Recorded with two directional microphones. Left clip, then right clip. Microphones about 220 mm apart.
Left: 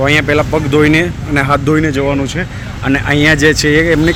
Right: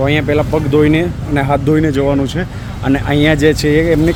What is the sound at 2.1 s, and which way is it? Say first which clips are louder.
Speech: even; 15° right (ahead or behind).